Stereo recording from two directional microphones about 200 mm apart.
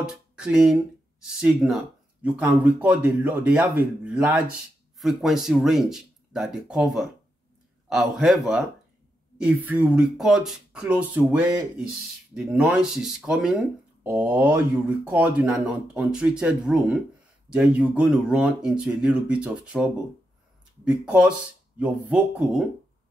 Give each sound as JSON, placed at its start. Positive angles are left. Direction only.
{"t": 0.0, "sound": "speech", "side_deg": -5}